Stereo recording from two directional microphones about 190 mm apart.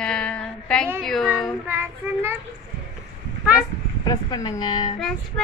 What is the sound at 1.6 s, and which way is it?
Child singing, 10° right (ahead or behind).